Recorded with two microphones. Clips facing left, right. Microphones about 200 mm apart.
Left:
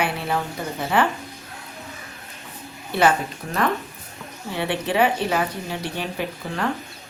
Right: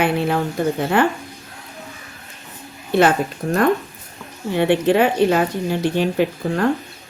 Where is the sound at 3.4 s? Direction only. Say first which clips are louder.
Right 7 dB; 45° right (ahead or behind).